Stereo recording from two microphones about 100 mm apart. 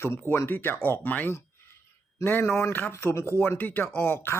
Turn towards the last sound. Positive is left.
turn(degrees=20)  # may be behind; listen again after turning